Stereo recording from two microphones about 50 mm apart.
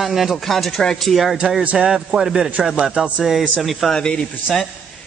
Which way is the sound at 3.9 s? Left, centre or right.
Centre.